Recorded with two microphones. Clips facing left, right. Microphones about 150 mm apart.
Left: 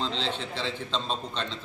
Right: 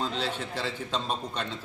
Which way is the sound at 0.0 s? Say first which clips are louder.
Even; 10° right (ahead or behind).